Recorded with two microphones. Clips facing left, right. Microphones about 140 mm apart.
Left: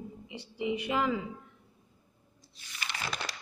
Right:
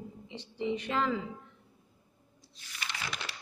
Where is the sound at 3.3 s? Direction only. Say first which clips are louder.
Left 2 dB; 40° left (ahead or behind).